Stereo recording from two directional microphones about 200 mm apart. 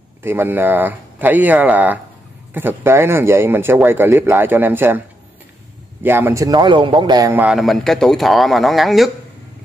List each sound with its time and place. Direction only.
0.2 s speech: 10° right (ahead or behind)
6.0 s speech: 10° right (ahead or behind)
7.4 s a man's voice: centre (ahead or behind)